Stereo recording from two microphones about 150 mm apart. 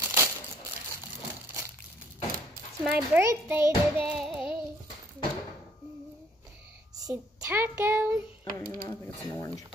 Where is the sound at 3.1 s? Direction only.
15° right (ahead or behind).